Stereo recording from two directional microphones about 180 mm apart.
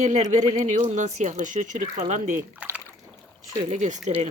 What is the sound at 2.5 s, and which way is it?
Speech, 10° right (ahead or behind).